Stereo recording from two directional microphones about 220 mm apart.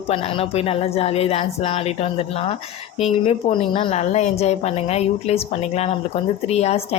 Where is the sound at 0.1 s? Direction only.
25° left (ahead or behind).